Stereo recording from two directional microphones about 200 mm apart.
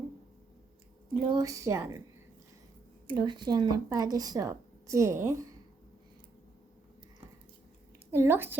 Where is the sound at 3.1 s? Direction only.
20° right (ahead or behind).